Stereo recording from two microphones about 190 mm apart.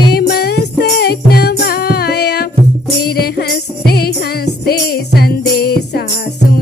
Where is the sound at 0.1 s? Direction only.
55° left (ahead or behind).